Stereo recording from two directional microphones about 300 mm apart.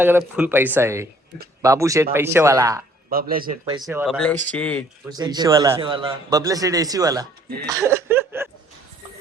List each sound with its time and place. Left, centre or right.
0.0 s a man's voice: centre
3.1 s speech: right
3.8 s speech: centre
5.0 s a man's voice: centre
7.7 s chuckle: centre